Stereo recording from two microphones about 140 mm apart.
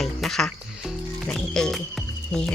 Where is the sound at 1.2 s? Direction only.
5° left (ahead or behind).